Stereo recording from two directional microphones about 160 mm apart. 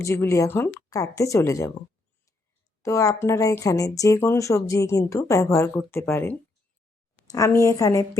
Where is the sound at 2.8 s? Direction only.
20° left (ahead or behind).